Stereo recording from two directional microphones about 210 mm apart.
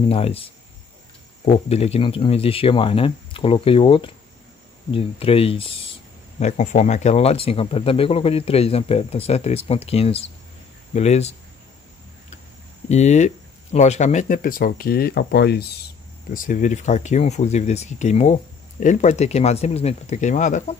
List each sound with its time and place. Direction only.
0.1 s speech: 25° left (ahead or behind)
12.8 s speech: 35° left (ahead or behind); by 15.6 s 50° left (ahead or behind)
16.3 s speech: 40° left (ahead or behind)